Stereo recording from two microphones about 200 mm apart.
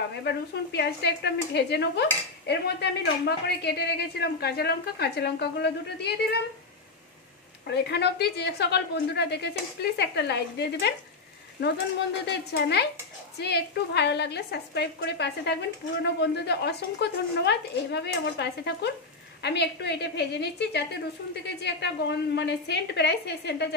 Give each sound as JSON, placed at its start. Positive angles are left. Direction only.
{"t": 0.2, "sound": "a woman's voice", "side_deg": 55}
{"t": 7.6, "sound": "a woman's voice", "side_deg": 55}